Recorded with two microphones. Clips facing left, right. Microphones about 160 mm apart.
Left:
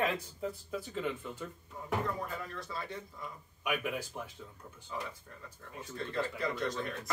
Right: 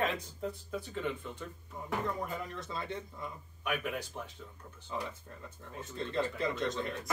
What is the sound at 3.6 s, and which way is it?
Speech, 10° left (ahead or behind).